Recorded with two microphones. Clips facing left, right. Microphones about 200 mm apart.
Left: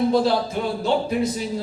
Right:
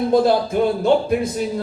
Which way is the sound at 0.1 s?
55° right (ahead or behind).